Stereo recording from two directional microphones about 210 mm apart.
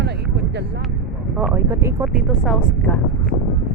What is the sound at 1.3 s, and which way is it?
Speech, 5° right (ahead or behind).